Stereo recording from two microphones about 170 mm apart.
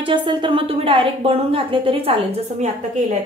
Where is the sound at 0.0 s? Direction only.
30° right (ahead or behind).